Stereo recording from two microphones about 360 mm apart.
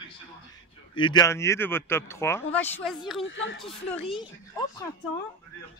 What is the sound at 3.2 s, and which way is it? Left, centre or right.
Speech, left.